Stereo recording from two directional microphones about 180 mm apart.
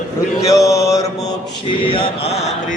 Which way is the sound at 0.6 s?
20° left (ahead or behind).